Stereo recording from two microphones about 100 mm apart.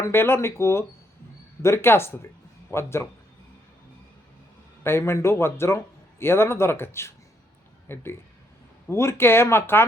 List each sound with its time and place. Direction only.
0.0 s a man's voice: 25° left (ahead or behind)
4.8 s a man's voice: 25° left (ahead or behind)